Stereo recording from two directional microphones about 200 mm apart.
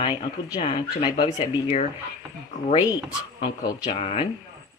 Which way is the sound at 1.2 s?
30° left (ahead or behind).